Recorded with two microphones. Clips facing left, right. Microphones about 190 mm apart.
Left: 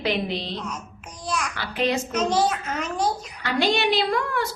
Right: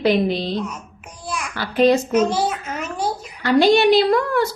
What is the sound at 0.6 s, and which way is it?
Speech, 10° right (ahead or behind).